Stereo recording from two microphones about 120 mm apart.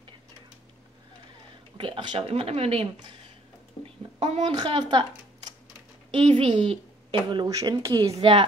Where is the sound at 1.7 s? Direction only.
40° right (ahead or behind).